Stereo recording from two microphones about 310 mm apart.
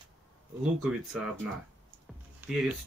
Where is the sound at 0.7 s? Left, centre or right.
Centre.